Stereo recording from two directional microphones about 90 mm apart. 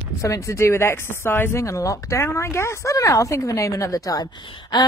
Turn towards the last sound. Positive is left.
turn(degrees=45)  # may be behind; listen again after turning